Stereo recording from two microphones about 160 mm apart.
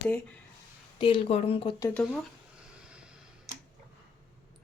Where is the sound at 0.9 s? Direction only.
35° left (ahead or behind).